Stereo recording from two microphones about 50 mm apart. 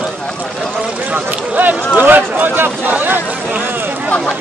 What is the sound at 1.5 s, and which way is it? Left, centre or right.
Speech, right.